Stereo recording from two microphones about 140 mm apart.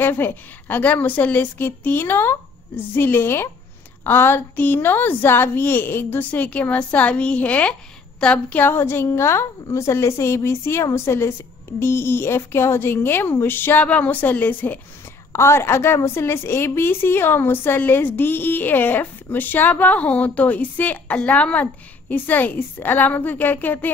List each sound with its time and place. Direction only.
0.0 s a woman's voice: 15° left (ahead or behind)